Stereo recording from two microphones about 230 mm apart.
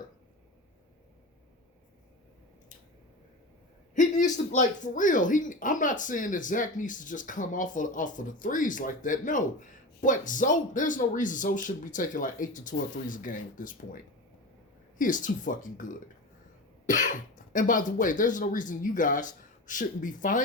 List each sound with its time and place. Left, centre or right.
3.9 s speech: left